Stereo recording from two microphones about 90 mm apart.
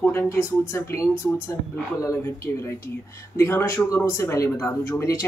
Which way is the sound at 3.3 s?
30° left (ahead or behind).